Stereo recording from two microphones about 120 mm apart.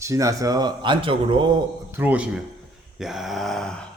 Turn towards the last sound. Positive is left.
turn(degrees=5)  # may be behind; listen again after turning